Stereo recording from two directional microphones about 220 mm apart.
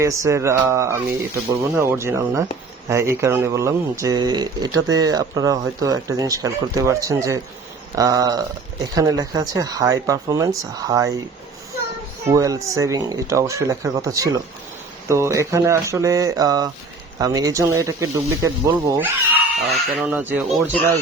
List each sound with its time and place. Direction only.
0.0 s speech: 15° right (ahead or behind)
12.3 s speech: 15° right (ahead or behind)